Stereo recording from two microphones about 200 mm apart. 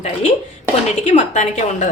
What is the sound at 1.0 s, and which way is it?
Speech, 35° left (ahead or behind).